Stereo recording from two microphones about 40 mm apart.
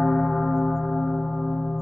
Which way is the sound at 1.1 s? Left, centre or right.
Left.